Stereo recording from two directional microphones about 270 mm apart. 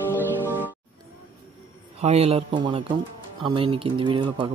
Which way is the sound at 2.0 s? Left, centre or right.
Right.